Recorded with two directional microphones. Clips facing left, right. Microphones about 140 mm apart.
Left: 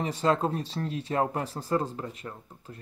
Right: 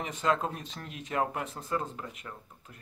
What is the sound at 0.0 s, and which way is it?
Speech, 35° left (ahead or behind).